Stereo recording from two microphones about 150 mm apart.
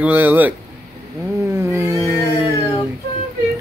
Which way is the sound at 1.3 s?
20° right (ahead or behind).